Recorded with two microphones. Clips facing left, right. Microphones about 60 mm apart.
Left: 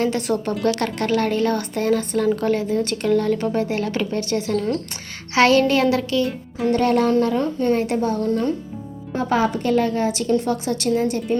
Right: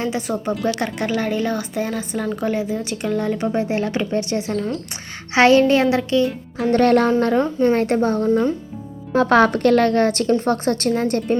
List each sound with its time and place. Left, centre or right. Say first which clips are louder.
0.2 s a woman's voice: left 1 dB; centre; by 6.2 s right
6.7 s a woman's voice: right 3 dB; right
8.3 s a woman's voice: right 3 dB; centre
9.1 s a woman's voice: right 6 dB; right